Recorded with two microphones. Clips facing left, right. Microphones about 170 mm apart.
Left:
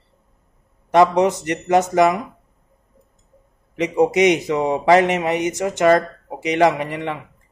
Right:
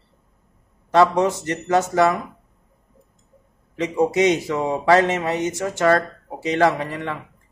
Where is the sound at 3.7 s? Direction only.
20° left (ahead or behind).